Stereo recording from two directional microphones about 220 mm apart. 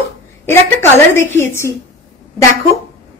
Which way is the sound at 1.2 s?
10° left (ahead or behind).